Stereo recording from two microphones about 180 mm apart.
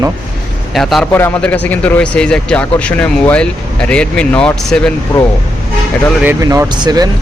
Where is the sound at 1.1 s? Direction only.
10° left (ahead or behind).